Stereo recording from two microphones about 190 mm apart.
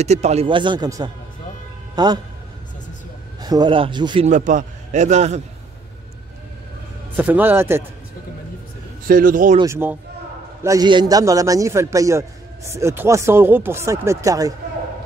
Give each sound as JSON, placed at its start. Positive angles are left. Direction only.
{"t": 0.0, "sound": "speech", "side_deg": -35}
{"t": 3.3, "sound": "speech", "side_deg": -20}
{"t": 4.3, "sound": "a man's voice", "side_deg": -40}
{"t": 7.2, "sound": "a man's voice", "side_deg": -10}
{"t": 9.0, "sound": "speech", "side_deg": -45}
{"t": 9.6, "sound": "a man's voice", "side_deg": -15}